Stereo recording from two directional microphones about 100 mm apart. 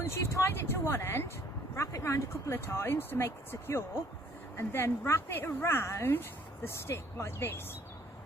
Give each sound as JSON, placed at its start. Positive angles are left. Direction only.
{"t": 0.0, "sound": "speech", "side_deg": 25}